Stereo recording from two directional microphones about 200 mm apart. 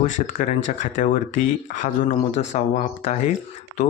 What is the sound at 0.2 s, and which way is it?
Speech, 40° left (ahead or behind).